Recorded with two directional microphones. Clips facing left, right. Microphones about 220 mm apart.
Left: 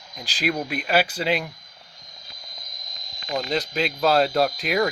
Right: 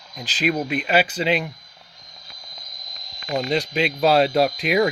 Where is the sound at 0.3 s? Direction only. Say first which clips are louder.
Right 3 dB; 10° left (ahead or behind).